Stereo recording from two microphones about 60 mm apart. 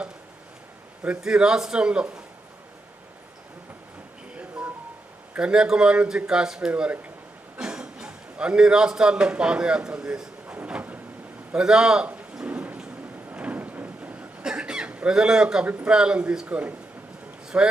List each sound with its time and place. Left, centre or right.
1.2 s a man's voice: centre
4.4 s a sound: right
5.3 s a man's voice: centre
10.7 s vehicle: right
11.5 s a man's voice: centre
12.5 s a sound: right
14.4 s a sound: centre
15.9 s a man's voice: centre
16.5 s speech: right